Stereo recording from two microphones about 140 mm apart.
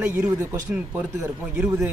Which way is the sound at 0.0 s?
10° right (ahead or behind).